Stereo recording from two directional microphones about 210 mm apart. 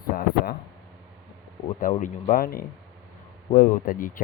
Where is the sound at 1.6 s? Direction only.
35° left (ahead or behind).